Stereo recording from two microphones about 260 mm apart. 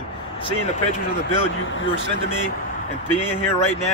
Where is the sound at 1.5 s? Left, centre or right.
Left.